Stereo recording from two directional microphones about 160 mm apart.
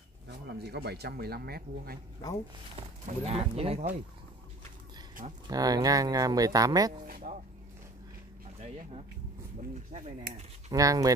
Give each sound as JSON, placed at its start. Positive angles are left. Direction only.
{"t": 0.6, "sound": "speech", "side_deg": -90}
{"t": 2.7, "sound": "speech", "side_deg": -40}
{"t": 5.5, "sound": "speech", "side_deg": -25}
{"t": 7.1, "sound": "speech", "side_deg": -65}
{"t": 8.6, "sound": "speech", "side_deg": -45}
{"t": 10.7, "sound": "speech", "side_deg": -20}